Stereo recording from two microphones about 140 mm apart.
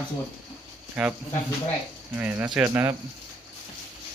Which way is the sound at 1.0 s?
5° right (ahead or behind).